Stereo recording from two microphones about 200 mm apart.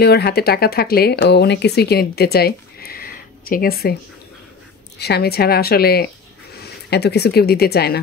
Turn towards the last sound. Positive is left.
turn(degrees=50)  # may be behind; listen again after turning